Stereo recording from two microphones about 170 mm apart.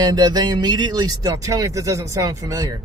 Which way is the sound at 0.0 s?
25° right (ahead or behind).